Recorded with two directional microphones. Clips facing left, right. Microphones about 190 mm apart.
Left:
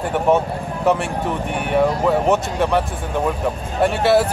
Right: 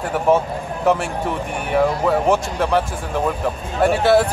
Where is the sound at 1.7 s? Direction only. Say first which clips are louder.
Even; centre (ahead or behind).